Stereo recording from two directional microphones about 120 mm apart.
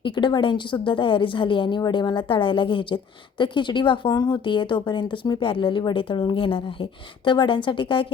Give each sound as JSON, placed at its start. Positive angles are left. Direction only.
{"t": 0.0, "sound": "a woman's voice", "side_deg": 40}